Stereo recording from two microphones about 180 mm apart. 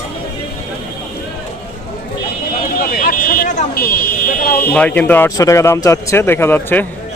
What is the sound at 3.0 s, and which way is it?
Vehicle, 50° left (ahead or behind).